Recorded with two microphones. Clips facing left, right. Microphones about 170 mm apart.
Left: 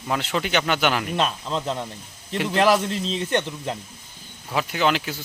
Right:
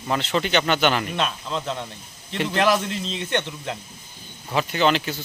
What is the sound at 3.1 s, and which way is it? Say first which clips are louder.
Speech: left 2 dB; 35° left (ahead or behind).